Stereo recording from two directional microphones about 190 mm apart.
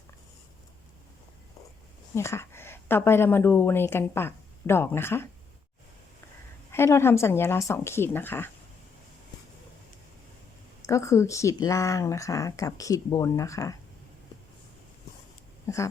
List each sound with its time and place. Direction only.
2.1 s a woman's voice: 15° left (ahead or behind)
6.7 s speech: 15° left (ahead or behind)
10.8 s speech: 15° left (ahead or behind)
15.6 s speech: 15° left (ahead or behind)